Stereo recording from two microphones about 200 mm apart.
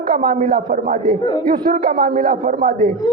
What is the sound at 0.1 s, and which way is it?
A man's voice, 45° right (ahead or behind).